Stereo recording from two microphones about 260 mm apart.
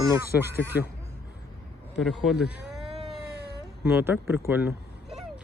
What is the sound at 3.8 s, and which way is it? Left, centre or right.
Speech, centre.